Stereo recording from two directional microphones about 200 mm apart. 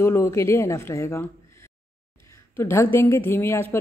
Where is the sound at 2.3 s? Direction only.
10° left (ahead or behind).